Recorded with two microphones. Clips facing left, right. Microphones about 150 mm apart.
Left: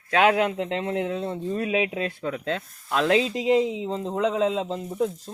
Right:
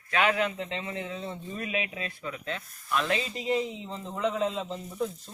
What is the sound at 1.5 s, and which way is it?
Speech, 80° left.